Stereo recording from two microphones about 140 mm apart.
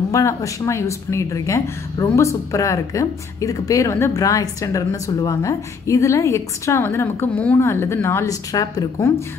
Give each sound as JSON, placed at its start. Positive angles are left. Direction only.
{"t": 0.1, "sound": "speech", "side_deg": 20}